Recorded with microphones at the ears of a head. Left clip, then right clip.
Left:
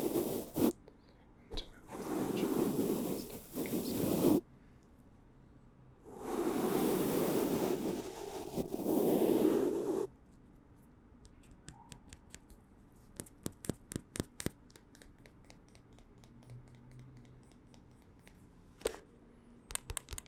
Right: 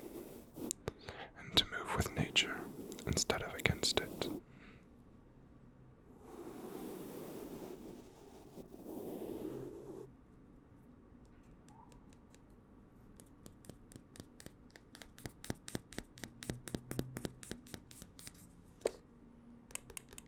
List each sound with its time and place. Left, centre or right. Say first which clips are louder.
0.0 s zipper: left 15 dB; left
0.9 s whispering: right 14 dB; right
2.0 s whispering: left 2 dB; left
3.2 s whispering: right 10 dB; right
4.0 s sidetone: left 12 dB; left
6.1 s waves: left 15 dB; left
13.1 s a sound: left 15 dB; left
14.9 s a sound: right 6 dB; right
19.6 s a sound: left 7 dB; left